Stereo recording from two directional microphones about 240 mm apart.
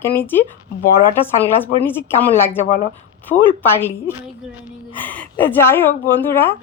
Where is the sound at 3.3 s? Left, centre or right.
Left.